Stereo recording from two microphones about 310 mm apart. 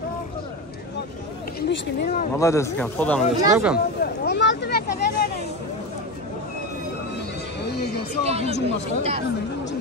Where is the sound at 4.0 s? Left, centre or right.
Left.